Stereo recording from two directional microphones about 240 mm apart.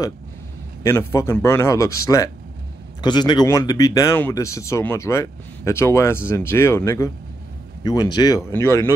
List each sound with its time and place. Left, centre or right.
0.8 s speech: centre